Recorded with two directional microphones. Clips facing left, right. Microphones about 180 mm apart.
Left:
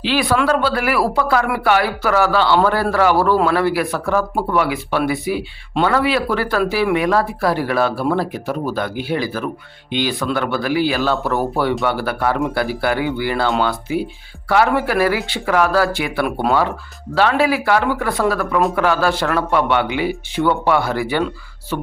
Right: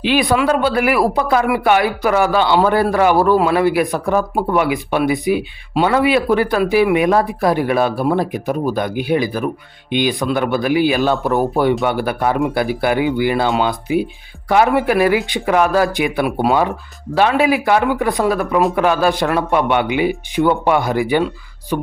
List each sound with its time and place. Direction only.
0.0 s speech: 15° right (ahead or behind)